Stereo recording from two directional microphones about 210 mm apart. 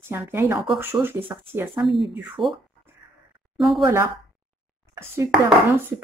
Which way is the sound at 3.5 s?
Centre (ahead or behind).